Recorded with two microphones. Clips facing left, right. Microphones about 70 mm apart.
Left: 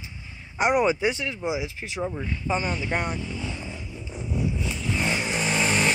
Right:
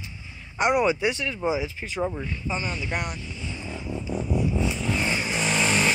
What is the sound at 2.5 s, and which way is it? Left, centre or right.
Speech, left.